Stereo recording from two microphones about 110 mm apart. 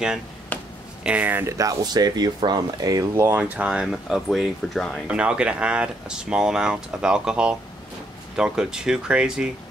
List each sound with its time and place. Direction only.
0.5 s a sound: 15° left (ahead or behind)
1.0 s speech: 15° right (ahead or behind)
1.6 s speech: 35° right (ahead or behind)
3.3 s speech: 15° right (ahead or behind); by 5.0 s 5° left (ahead or behind)
5.0 s speech: 10° right (ahead or behind)